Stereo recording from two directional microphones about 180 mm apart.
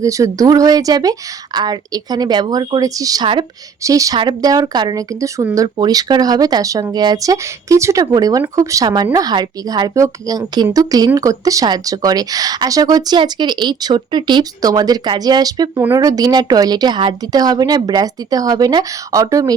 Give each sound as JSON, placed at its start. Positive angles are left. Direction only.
{"t": 0.0, "sound": "a woman's voice", "side_deg": -20}